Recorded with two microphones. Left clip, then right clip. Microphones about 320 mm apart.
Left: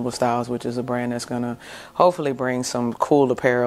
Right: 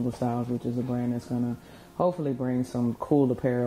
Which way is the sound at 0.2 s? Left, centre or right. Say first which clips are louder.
Left 11 dB; centre.